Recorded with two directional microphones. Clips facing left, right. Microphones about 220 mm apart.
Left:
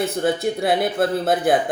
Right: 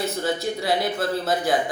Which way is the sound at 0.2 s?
55° left (ahead or behind).